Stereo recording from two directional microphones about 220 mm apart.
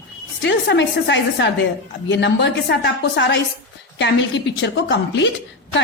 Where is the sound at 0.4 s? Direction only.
55° left (ahead or behind).